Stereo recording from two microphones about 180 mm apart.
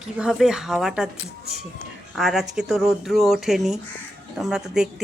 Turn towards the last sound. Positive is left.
turn(degrees=-5)  # may be behind; listen again after turning